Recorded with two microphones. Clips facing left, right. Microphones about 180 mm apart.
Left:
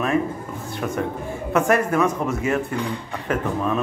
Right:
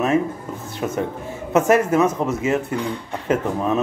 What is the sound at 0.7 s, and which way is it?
A man's voice, 20° right (ahead or behind).